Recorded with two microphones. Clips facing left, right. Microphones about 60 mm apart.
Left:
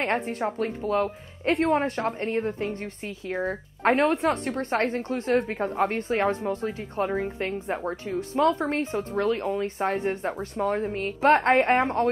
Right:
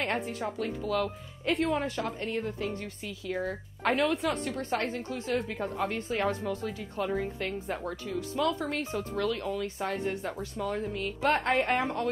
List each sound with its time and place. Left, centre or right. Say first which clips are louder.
0.0 s a woman's voice: left 5 dB; left